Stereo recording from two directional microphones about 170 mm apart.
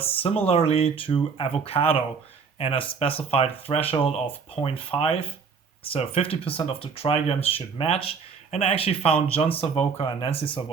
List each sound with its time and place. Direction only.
0.4 s speech: 35° left (ahead or behind)